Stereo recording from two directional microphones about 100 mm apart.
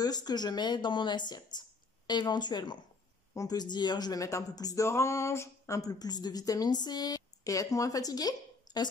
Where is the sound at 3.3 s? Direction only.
35° left (ahead or behind).